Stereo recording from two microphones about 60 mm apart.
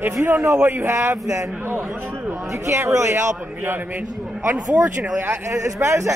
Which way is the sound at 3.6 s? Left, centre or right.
Right.